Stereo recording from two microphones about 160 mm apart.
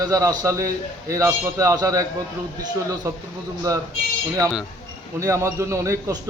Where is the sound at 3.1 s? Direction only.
15° right (ahead or behind).